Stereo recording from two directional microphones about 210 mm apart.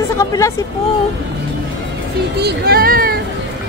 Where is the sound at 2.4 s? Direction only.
50° right (ahead or behind).